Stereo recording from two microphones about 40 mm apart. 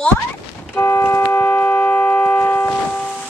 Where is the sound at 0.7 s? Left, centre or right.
Left.